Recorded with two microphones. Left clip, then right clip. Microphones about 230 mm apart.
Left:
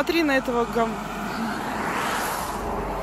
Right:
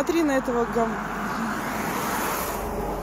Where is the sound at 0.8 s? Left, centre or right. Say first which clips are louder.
Right 1 dB; centre.